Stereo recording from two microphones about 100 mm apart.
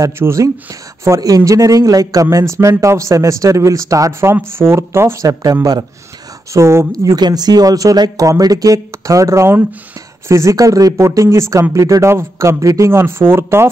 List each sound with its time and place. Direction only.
0.0 s speech: 30° right (ahead or behind)
6.5 s speech: 30° right (ahead or behind)
6.9 s speech: 40° right (ahead or behind)